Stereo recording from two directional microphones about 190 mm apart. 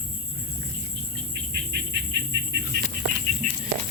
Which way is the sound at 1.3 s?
60° right (ahead or behind).